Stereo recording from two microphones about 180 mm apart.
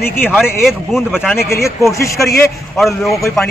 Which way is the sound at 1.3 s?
15° left (ahead or behind).